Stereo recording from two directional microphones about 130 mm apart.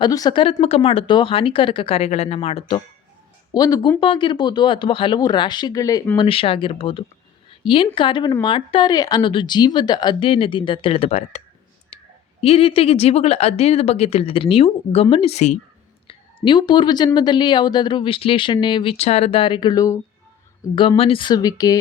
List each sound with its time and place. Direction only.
0.0 s speech: 30° left (ahead or behind)
3.5 s speech: 30° left (ahead or behind)
6.1 s speech: 45° left (ahead or behind)
12.4 s speech: 45° left (ahead or behind)
16.0 s a woman's voice: 40° left (ahead or behind)
20.7 s speech: 45° left (ahead or behind)